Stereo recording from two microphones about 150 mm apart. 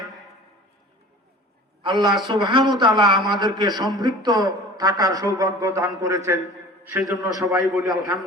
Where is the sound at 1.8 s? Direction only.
30° right (ahead or behind); by 7.1 s 10° right (ahead or behind).